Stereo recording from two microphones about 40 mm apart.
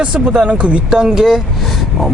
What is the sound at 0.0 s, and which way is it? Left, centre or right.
Speech, right.